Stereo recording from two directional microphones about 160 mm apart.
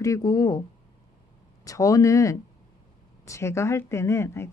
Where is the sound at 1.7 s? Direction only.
20° left (ahead or behind).